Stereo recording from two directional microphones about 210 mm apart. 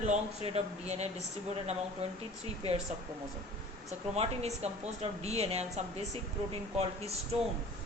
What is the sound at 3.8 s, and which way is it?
Speech, 30° right (ahead or behind).